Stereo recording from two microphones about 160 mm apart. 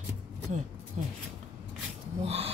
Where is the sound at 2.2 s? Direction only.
40° right (ahead or behind).